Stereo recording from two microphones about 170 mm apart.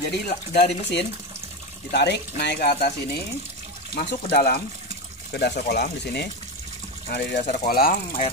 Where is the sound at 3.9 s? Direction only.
70° left (ahead or behind).